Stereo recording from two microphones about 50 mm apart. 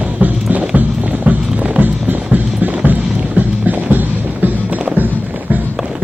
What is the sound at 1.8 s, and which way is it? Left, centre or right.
Music, right.